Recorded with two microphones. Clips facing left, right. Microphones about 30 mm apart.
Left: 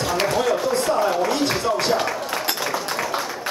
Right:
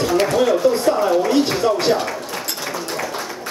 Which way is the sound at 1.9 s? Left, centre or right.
Centre.